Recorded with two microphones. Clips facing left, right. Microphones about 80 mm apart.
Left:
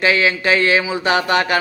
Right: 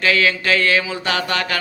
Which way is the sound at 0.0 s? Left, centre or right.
Left.